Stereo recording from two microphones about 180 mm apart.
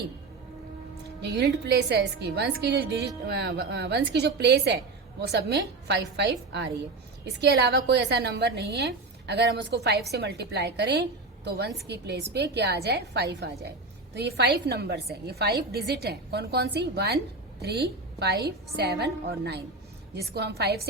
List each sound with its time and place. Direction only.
1.2 s a woman's voice: 70° right (ahead or behind)